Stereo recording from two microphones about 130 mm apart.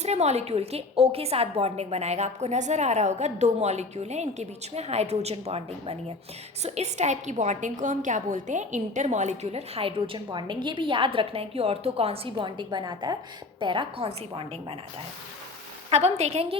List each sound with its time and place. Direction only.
0.0 s a woman's voice: 55° right (ahead or behind)
15.9 s a woman's voice: 55° right (ahead or behind)